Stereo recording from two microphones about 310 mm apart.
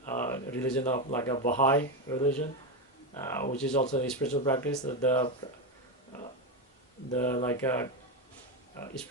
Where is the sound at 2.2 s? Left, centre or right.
Left.